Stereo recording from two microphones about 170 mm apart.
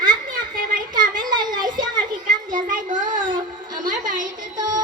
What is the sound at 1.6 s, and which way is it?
Children playing, 55° right (ahead or behind).